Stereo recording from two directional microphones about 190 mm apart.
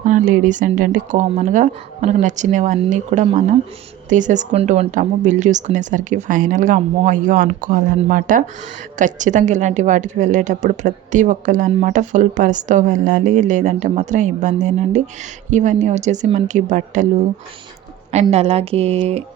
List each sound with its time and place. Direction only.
0.0 s a woman's voice: 40° right (ahead or behind)
18.1 s a woman's voice: 35° right (ahead or behind)